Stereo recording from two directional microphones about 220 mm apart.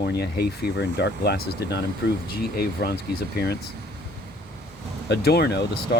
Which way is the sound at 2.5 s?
45° left (ahead or behind).